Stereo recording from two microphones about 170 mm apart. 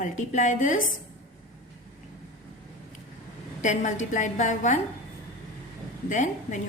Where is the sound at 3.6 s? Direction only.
45° left (ahead or behind).